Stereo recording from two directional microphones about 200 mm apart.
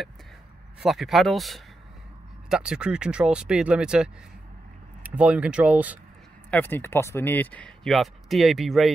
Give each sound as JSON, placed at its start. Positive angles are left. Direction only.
{"t": 0.8, "sound": "speech", "side_deg": 0}
{"t": 6.5, "sound": "speech", "side_deg": 10}